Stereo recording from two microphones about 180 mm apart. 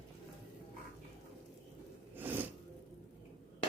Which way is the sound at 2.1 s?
10° right (ahead or behind).